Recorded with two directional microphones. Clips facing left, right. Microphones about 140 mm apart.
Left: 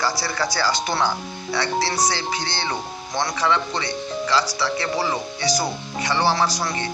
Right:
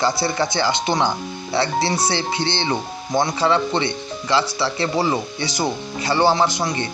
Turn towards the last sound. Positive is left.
turn(degrees=-25)  # may be behind; listen again after turning